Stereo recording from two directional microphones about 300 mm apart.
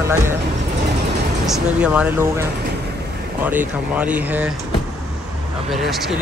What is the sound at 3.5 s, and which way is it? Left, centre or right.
Speech, centre.